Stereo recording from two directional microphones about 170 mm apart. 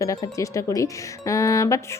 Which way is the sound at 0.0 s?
20° left (ahead or behind).